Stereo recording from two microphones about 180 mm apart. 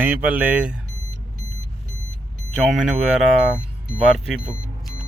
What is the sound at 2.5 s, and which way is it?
Speech, centre (ahead or behind).